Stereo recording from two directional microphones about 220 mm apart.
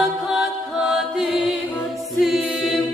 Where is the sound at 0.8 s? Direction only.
Centre (ahead or behind).